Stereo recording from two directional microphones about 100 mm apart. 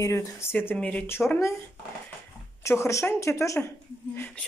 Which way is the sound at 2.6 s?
30° left (ahead or behind).